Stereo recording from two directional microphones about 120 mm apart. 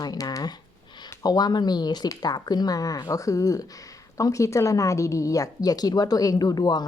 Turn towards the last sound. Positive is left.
turn(degrees=35)  # may be behind; listen again after turning